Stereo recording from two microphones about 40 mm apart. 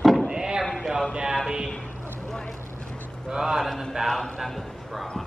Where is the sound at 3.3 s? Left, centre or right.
Centre.